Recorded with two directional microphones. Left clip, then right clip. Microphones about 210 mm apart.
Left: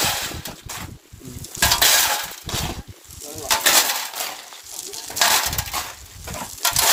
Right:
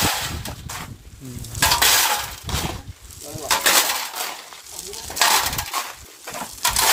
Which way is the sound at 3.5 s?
30° left (ahead or behind).